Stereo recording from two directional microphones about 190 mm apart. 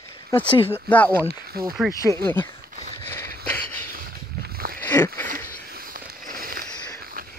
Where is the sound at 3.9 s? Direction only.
50° right (ahead or behind).